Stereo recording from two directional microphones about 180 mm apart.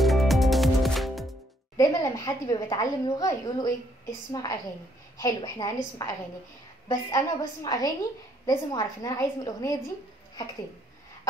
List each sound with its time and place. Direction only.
0.0 s music: centre (ahead or behind)
1.8 s a woman's voice: 20° left (ahead or behind)